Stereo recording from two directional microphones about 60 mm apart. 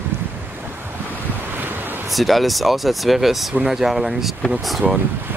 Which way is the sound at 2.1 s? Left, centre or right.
Centre.